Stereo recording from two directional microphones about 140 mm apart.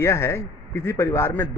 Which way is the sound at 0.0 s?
20° left (ahead or behind).